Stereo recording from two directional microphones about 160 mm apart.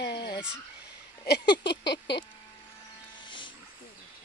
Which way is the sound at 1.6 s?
90° left.